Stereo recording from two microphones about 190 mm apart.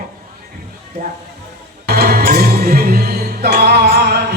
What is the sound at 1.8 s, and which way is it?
Music, 55° right (ahead or behind).